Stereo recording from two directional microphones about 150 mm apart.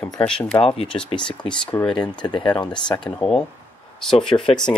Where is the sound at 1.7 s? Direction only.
20° left (ahead or behind).